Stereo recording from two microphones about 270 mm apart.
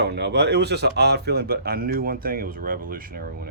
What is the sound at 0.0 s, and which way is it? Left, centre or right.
Speech, right.